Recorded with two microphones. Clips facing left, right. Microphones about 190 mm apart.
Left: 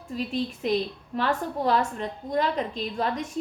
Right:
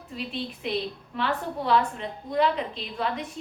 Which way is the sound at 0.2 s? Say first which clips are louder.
Left 5 dB; 40° left (ahead or behind).